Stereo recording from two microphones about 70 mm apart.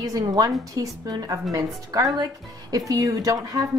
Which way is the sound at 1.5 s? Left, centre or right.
Right.